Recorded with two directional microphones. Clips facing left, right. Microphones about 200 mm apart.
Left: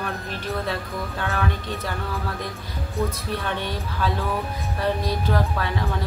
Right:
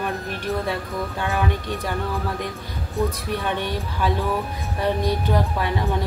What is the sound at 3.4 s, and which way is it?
Speech, 15° right (ahead or behind).